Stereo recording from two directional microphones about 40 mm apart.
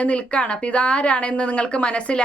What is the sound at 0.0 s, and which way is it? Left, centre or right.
Speech, left.